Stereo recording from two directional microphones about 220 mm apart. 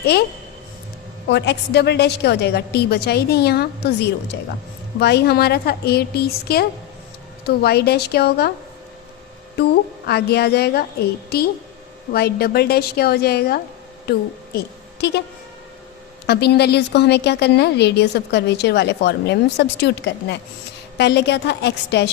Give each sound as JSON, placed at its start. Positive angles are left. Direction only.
{"t": 0.0, "sound": "a woman's voice", "side_deg": 45}
{"t": 1.3, "sound": "a woman's voice", "side_deg": 50}
{"t": 10.1, "sound": "a woman's voice", "side_deg": 45}
{"t": 12.1, "sound": "a woman's voice", "side_deg": 45}
{"t": 14.5, "sound": "a sound", "side_deg": 50}
{"t": 16.2, "sound": "a woman's voice", "side_deg": 50}